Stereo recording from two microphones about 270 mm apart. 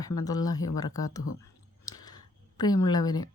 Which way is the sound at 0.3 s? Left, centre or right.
Centre.